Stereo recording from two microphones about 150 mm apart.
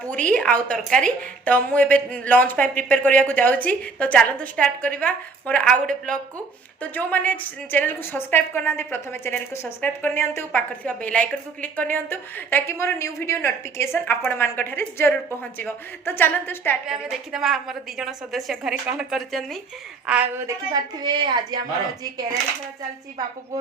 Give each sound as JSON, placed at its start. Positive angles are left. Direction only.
{"t": 0.1, "sound": "a woman's voice", "side_deg": 10}
{"t": 16.8, "sound": "a woman's voice", "side_deg": -5}
{"t": 20.3, "sound": "speech", "side_deg": -20}